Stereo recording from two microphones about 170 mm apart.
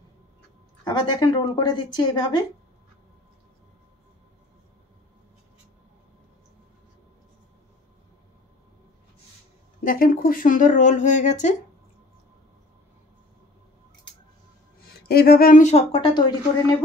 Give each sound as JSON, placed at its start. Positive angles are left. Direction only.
{"t": 0.8, "sound": "a woman's voice", "side_deg": 25}
{"t": 9.8, "sound": "speech", "side_deg": 55}
{"t": 15.0, "sound": "a woman's voice", "side_deg": 65}